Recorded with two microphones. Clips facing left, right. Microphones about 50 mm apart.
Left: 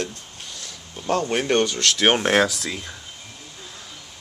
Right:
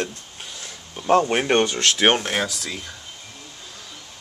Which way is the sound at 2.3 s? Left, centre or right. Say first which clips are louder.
Left 6 dB; left.